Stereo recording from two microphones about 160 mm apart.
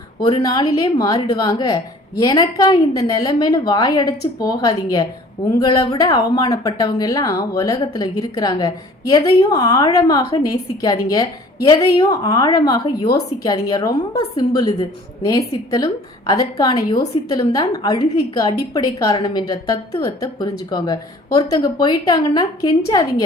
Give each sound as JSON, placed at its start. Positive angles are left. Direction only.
{"t": 0.2, "sound": "speech", "side_deg": 25}